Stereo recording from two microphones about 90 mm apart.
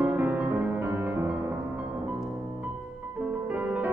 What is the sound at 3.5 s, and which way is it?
Music, 15° right (ahead or behind).